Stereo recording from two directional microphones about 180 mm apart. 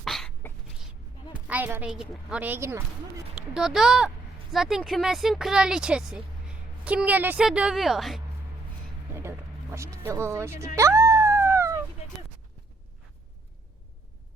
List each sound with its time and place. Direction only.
0.0 s throat clearing: centre (ahead or behind)
1.3 s a woman's voice: 10° right (ahead or behind)
3.3 s speech: 5° right (ahead or behind)
9.7 s a woman's voice: 15° right (ahead or behind)
10.8 s dog: 15° right (ahead or behind)